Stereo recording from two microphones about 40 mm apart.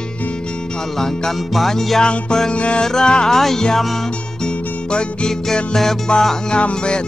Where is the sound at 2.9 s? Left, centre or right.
Centre.